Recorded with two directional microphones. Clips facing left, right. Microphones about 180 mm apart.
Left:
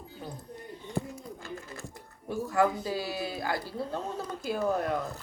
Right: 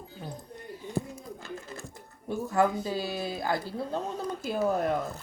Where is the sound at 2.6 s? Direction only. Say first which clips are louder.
Right 1 dB; 25° right (ahead or behind).